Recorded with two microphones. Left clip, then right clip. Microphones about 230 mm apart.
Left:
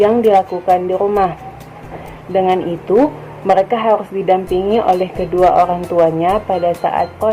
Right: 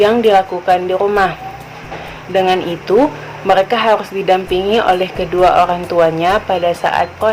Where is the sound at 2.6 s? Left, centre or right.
Centre.